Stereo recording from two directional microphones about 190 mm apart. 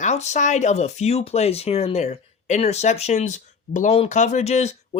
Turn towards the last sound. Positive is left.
turn(degrees=35)  # may be behind; listen again after turning